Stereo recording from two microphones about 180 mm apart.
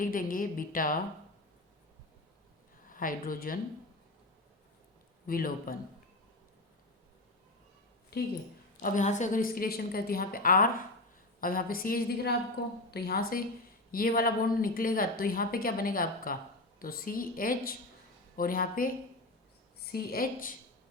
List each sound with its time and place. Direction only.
0.0 s a woman's voice: 50° left (ahead or behind)
2.8 s speech: 50° left (ahead or behind)
5.2 s a woman's voice: 55° left (ahead or behind)
8.1 s speech: 60° left (ahead or behind)
8.8 s a woman's voice: 45° left (ahead or behind)